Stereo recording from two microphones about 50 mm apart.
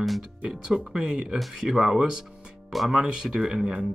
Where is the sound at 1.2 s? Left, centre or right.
Centre.